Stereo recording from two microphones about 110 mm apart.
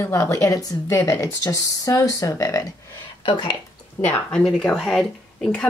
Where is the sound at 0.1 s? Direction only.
30° left (ahead or behind).